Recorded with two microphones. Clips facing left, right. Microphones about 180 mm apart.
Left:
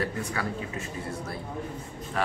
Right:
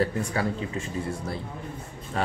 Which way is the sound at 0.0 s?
30° right (ahead or behind).